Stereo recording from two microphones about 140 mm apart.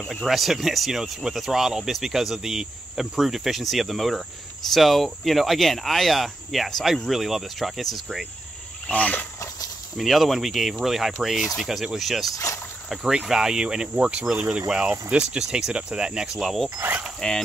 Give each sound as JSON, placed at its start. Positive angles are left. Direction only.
{"t": 0.0, "sound": "speech", "side_deg": 0}
{"t": 12.3, "sound": "speech", "side_deg": 25}
{"t": 12.9, "sound": "speech", "side_deg": -5}
{"t": 16.7, "sound": "mechanisms", "side_deg": -15}
{"t": 17.0, "sound": "a sound", "side_deg": 5}